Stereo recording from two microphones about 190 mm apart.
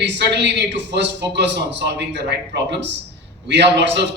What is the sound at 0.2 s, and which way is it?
A man's voice, 65° right (ahead or behind).